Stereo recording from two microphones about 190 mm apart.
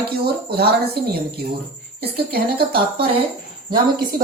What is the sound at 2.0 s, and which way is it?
A woman's voice, 55° right (ahead or behind).